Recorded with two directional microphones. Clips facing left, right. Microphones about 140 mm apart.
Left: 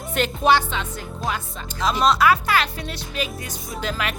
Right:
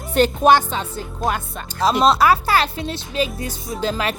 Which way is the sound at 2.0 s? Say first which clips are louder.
Right 1 dB; 35° right (ahead or behind).